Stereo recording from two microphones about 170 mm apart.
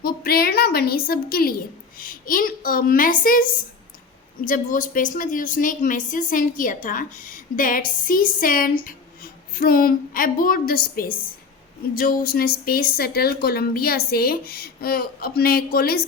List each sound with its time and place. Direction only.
0.0 s a woman's voice: 65° left (ahead or behind)